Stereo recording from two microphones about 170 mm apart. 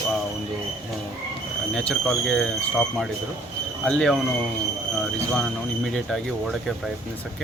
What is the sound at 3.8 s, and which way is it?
Speech, 5° left (ahead or behind).